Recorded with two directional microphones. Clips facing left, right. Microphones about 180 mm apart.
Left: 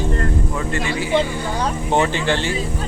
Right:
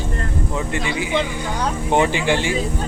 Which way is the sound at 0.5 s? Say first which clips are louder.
Even; 15° right (ahead or behind).